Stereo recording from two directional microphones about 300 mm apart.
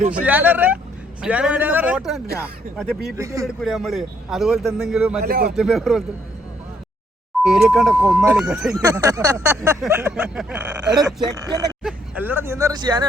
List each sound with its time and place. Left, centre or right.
0.1 s speech: centre
5.2 s speech: right
5.5 s speech: centre
7.5 s speech: centre